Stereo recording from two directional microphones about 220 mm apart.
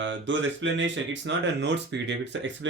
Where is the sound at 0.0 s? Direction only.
55° right (ahead or behind).